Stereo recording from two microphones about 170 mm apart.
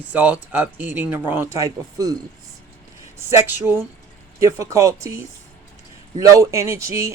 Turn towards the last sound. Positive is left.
turn(degrees=-15)  # may be behind; listen again after turning